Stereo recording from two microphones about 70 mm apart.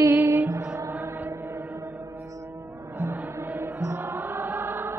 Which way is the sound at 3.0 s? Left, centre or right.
Right.